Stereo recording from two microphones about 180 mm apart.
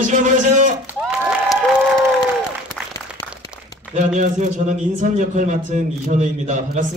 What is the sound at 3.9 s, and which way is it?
Speech, 45° right (ahead or behind).